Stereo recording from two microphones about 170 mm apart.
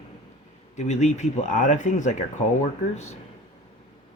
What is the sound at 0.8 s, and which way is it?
Speech, 45° left (ahead or behind).